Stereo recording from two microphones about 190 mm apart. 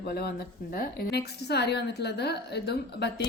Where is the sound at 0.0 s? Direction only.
55° left (ahead or behind).